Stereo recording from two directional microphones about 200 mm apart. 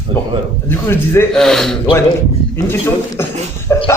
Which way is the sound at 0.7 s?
10° left (ahead or behind).